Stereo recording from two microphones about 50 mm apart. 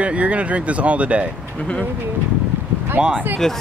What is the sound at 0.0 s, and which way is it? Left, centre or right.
Speech, right.